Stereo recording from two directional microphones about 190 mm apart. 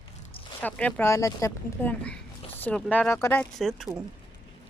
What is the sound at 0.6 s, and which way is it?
Speech, 10° left (ahead or behind).